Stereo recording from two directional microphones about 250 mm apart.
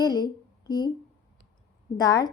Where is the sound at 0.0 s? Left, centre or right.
Centre.